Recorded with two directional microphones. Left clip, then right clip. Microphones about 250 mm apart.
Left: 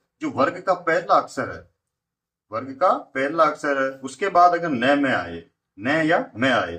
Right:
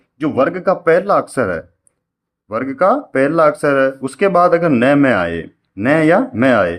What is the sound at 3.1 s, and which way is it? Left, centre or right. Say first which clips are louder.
Speech: right 7 dB; right.